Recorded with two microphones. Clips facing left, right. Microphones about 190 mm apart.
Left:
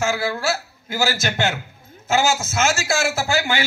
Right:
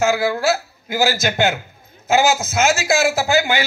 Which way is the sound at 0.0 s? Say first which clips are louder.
Right 5 dB; 15° right (ahead or behind).